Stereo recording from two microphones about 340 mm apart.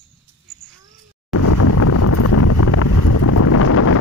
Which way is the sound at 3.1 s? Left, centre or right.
Left.